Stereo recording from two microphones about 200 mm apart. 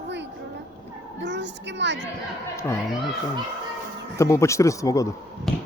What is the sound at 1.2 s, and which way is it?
Child singing, 60° right (ahead or behind).